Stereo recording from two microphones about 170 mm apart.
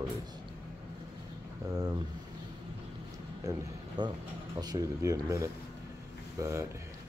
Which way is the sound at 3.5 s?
25° right (ahead or behind).